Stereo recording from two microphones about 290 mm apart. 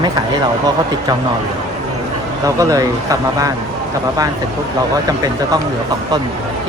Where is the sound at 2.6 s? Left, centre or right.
Centre.